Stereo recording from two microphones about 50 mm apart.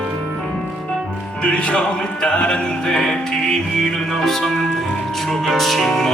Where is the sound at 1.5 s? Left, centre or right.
Left.